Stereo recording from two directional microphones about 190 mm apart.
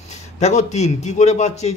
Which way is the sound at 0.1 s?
35° left (ahead or behind).